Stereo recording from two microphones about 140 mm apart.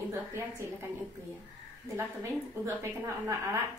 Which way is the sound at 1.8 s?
15° right (ahead or behind).